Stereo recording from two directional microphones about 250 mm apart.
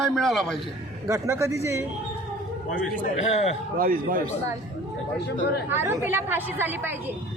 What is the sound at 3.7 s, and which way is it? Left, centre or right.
Speech, right.